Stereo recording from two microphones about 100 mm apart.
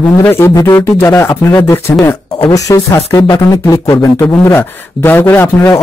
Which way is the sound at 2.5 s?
35° left (ahead or behind).